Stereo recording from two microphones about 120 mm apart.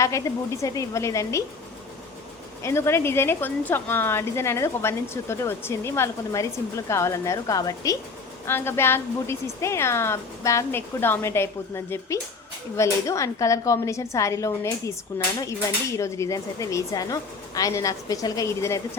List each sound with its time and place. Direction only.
0.0 s a woman's voice: 25° left (ahead or behind)
2.6 s a woman's voice: 20° left (ahead or behind)
8.4 s a woman's voice: 20° left (ahead or behind)
15.1 s a woman's voice: 15° left (ahead or behind)